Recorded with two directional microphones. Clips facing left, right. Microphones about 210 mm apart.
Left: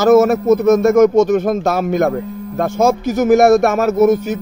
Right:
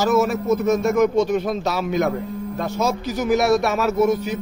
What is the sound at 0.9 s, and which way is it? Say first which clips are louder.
Speech: left 7 dB; 45° left (ahead or behind).